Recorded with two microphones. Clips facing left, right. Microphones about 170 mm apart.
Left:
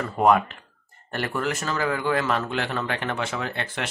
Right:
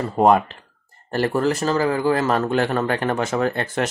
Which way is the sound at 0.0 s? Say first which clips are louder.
Right 3 dB; 30° right (ahead or behind).